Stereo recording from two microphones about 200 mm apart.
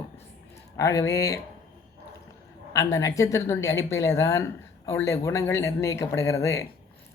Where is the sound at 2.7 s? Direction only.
15° left (ahead or behind).